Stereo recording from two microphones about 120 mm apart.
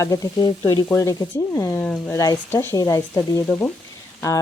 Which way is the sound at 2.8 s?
30° left (ahead or behind).